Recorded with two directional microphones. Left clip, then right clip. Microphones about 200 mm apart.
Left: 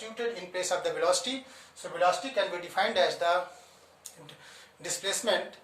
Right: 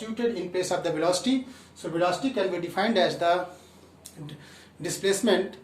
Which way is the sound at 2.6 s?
10° right (ahead or behind).